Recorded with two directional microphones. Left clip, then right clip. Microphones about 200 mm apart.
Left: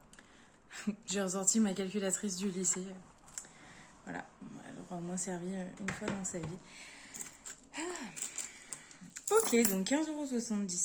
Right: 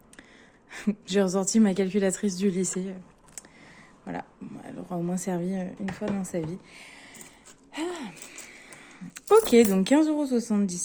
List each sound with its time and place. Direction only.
0.7 s a woman's voice: 40° right (ahead or behind)
4.0 s speech: 50° right (ahead or behind)
7.7 s a sound: 50° right (ahead or behind)
9.7 s speech: 50° right (ahead or behind)